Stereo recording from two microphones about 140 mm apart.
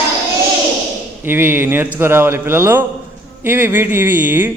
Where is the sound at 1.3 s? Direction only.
15° right (ahead or behind).